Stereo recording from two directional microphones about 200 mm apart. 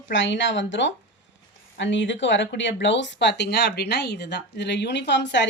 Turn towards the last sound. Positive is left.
turn(degrees=60)  # may be behind; listen again after turning